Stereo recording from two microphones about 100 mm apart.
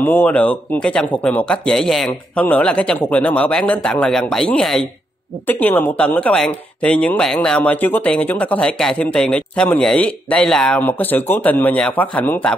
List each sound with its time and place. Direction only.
0.0 s speech: 20° left (ahead or behind)
2.3 s speech: 15° left (ahead or behind)
5.5 s speech: 20° left (ahead or behind)